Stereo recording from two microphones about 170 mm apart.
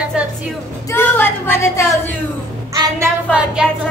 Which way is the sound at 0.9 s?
15° left (ahead or behind).